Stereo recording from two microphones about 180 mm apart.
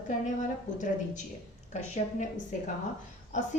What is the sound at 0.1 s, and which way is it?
A woman's voice, 45° left (ahead or behind).